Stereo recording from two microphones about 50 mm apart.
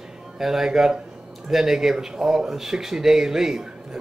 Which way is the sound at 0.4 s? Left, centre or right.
Centre.